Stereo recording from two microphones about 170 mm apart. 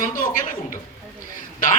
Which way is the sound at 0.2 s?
55° left (ahead or behind).